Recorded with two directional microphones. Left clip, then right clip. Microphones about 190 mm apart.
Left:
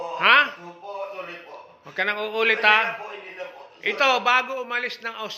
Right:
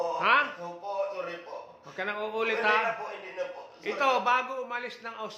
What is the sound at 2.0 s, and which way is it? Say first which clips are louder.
Speech: left 8 dB; 25° left (ahead or behind).